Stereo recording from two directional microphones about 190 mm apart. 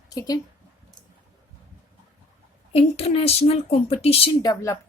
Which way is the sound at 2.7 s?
30° left (ahead or behind).